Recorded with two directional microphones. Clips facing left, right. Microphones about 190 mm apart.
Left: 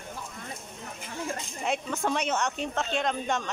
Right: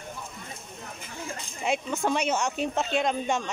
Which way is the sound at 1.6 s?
10° right (ahead or behind).